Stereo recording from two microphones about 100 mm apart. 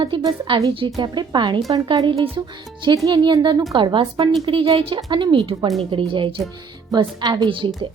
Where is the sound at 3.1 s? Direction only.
55° right (ahead or behind).